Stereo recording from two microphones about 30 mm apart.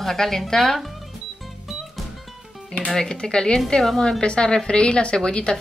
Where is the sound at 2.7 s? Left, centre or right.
Left.